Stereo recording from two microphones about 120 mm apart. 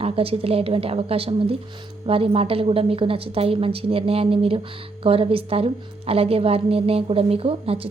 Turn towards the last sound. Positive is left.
turn(degrees=-50)  # may be behind; listen again after turning